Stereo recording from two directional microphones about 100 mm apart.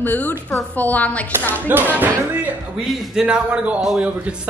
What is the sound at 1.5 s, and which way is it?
A man's voice, 20° right (ahead or behind).